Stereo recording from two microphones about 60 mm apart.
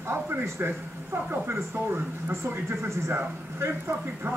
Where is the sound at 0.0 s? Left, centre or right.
Right.